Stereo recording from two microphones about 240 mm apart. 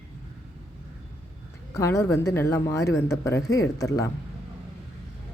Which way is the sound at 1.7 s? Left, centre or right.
Centre.